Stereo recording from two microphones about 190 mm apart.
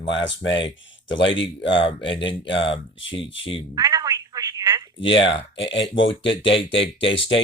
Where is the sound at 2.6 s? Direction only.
25° left (ahead or behind).